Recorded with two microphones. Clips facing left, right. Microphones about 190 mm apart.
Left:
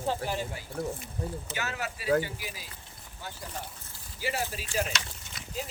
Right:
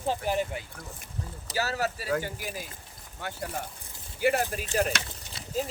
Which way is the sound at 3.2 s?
65° right (ahead or behind).